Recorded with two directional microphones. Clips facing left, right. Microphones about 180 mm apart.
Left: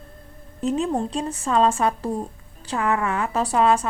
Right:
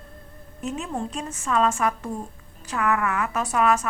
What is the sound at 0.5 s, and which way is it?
A woman's voice, 35° left (ahead or behind).